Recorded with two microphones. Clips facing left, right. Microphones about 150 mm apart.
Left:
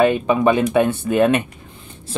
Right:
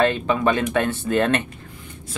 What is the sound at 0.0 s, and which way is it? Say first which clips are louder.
Speech: left 4 dB; 15° left (ahead or behind).